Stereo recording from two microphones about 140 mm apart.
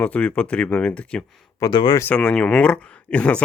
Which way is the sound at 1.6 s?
35° left (ahead or behind).